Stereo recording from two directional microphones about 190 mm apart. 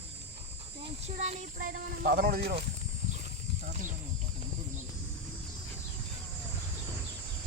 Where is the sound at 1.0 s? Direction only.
35° right (ahead or behind); by 2.6 s 55° right (ahead or behind).